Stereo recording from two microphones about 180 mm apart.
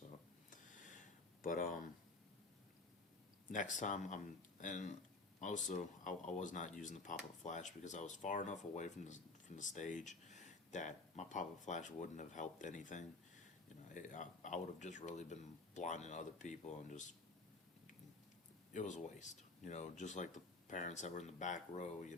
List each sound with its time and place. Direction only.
0.5 s a sound: 45° left (ahead or behind)
3.5 s speech: 45° left (ahead or behind)
18.7 s speech: 45° left (ahead or behind)